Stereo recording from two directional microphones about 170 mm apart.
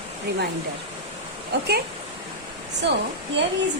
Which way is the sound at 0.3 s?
75° right (ahead or behind).